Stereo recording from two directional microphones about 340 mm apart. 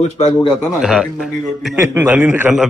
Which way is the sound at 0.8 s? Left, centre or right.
Centre.